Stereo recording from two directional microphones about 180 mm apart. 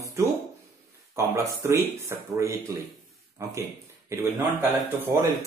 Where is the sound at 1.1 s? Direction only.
15° right (ahead or behind).